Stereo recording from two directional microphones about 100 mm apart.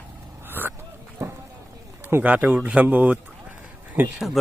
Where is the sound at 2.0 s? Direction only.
20° right (ahead or behind).